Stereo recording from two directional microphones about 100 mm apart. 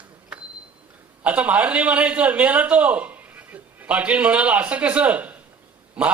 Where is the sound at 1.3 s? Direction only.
15° right (ahead or behind).